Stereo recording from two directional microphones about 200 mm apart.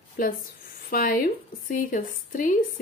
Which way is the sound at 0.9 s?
45° left (ahead or behind).